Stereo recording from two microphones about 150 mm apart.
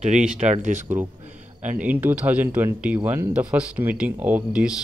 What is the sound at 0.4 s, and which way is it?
Speech, 55° right (ahead or behind).